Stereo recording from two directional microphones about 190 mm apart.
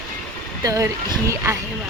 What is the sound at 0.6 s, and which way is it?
Speech, 20° right (ahead or behind).